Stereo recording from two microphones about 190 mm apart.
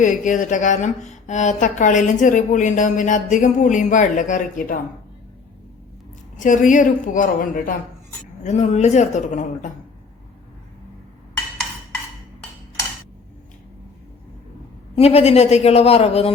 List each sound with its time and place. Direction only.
0.0 s speech: 40° left (ahead or behind)
6.4 s a woman's voice: 40° left (ahead or behind)
14.9 s speech: 30° left (ahead or behind)